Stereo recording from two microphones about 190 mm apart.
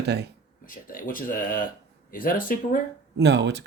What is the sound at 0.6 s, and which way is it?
Speech, 45° left (ahead or behind).